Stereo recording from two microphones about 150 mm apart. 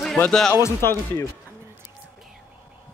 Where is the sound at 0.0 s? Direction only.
5° left (ahead or behind).